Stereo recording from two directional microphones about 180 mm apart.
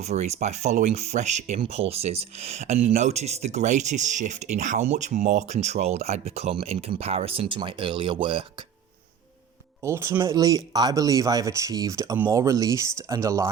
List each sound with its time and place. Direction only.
0.0 s speech: 40° right (ahead or behind)
9.8 s speech: 15° right (ahead or behind)